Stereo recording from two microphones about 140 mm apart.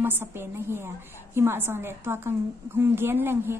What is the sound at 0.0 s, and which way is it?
A woman's voice, 15° right (ahead or behind).